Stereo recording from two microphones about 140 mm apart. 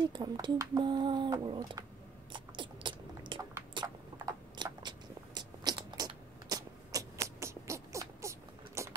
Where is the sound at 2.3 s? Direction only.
35° right (ahead or behind).